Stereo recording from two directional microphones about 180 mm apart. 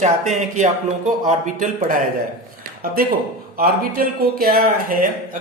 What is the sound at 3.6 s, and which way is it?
A man's voice, 55° right (ahead or behind).